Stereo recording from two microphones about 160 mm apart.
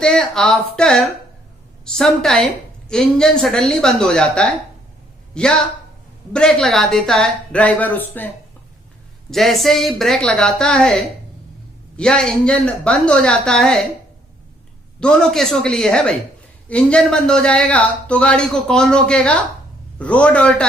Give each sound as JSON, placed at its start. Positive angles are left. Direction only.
{"t": 0.0, "sound": "a man's voice", "side_deg": 5}
{"t": 9.3, "sound": "speech", "side_deg": 0}
{"t": 11.9, "sound": "speech", "side_deg": 5}
{"t": 15.0, "sound": "a man's voice", "side_deg": 0}